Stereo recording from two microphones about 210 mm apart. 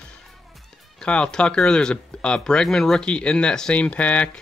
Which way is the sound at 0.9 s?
5° left (ahead or behind).